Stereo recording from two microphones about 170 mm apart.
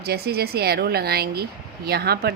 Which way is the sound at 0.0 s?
65° right (ahead or behind).